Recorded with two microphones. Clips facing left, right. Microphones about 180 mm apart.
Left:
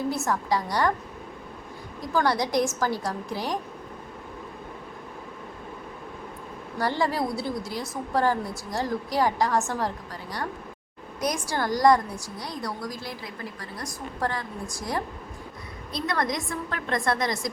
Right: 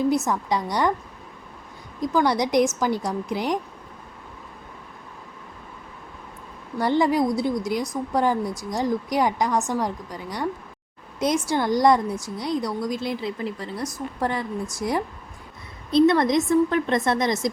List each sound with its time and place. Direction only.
0.3 s a woman's voice: 20° right (ahead or behind)
2.0 s a woman's voice: 20° right (ahead or behind)
6.7 s a woman's voice: 20° right (ahead or behind)